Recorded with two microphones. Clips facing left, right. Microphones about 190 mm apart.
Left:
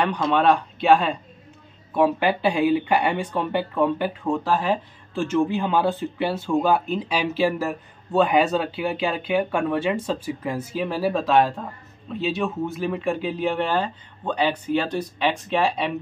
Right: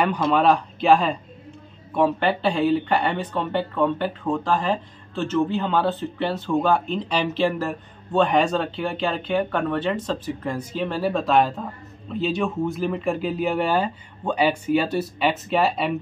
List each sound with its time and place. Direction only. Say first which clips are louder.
0.0 s speech: right 1 dB; 5° right (ahead or behind)